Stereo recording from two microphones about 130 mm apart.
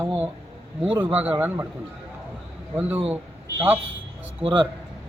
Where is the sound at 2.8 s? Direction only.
15° right (ahead or behind).